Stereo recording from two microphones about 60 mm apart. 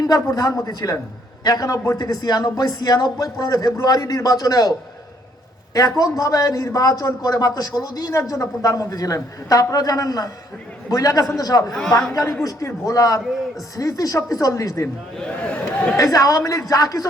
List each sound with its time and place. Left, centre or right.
0.0 s speech: left
3.8 s a man's voice: left
6.0 s a man's voice: left
8.2 s a man's voice: left
9.1 s a man's voice: left
12.1 s a man's voice: left
15.2 s speech: centre
16.0 s a man's voice: left